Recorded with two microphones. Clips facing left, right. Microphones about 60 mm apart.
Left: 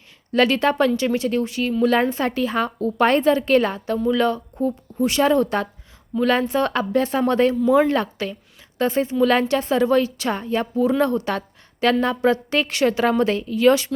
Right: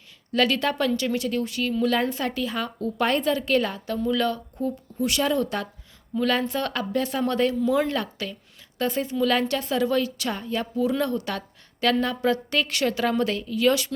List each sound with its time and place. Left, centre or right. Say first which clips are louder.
0.3 s a woman's voice: left 5 dB; left